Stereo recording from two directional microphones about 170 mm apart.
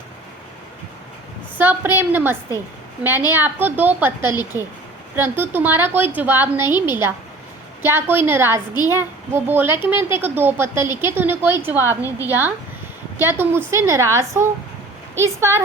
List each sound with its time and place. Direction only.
1.5 s a child's voice: 10° right (ahead or behind)